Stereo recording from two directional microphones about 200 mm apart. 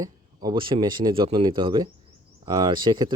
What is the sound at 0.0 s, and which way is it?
Speech, 20° right (ahead or behind).